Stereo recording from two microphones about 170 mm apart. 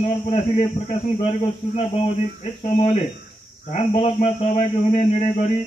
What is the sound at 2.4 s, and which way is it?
Speech, 35° left (ahead or behind).